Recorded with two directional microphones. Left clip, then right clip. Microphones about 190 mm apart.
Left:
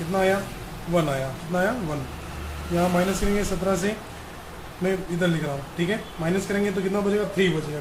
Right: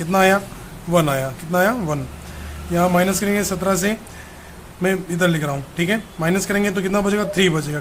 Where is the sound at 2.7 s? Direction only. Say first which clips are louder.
Right 6 dB; 30° right (ahead or behind).